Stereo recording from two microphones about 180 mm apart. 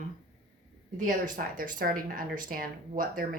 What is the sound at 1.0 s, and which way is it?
A woman's voice, 50° right (ahead or behind).